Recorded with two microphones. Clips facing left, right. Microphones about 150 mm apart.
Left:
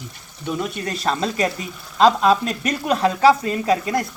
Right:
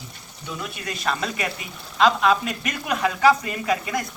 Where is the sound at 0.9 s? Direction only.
30° left (ahead or behind).